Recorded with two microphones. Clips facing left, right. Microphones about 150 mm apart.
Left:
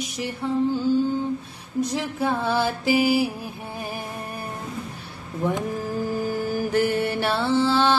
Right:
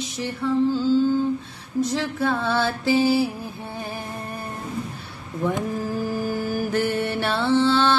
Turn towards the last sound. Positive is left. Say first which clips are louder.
# right 1 dB
turn(degrees=10)  # may be behind; listen again after turning